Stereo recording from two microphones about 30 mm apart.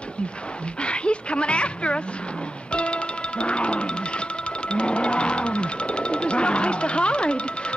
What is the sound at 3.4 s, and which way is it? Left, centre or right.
Music, left.